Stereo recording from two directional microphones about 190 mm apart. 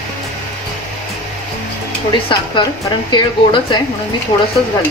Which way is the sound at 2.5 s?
25° left (ahead or behind).